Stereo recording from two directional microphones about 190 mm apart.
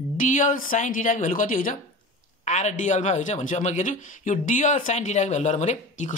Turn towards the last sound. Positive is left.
turn(degrees=40)  # may be behind; listen again after turning